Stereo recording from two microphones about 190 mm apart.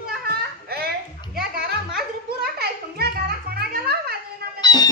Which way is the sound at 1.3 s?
55° right (ahead or behind).